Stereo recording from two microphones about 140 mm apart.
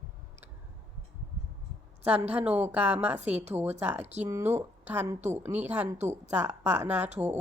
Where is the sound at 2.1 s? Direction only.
15° right (ahead or behind).